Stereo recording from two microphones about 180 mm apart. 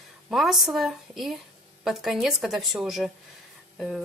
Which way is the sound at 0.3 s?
Centre (ahead or behind).